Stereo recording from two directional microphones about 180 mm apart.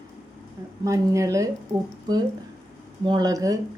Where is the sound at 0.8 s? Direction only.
15° right (ahead or behind).